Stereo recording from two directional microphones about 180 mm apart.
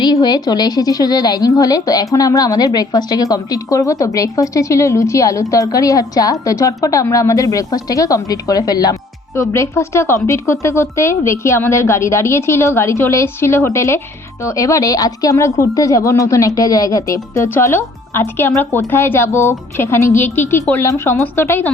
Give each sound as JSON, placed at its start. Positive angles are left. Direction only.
{"t": 0.0, "sound": "a woman's voice", "side_deg": 20}